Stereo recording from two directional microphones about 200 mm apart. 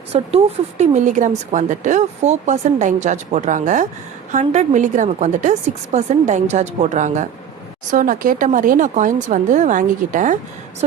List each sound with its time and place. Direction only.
0.1 s speech: 30° right (ahead or behind)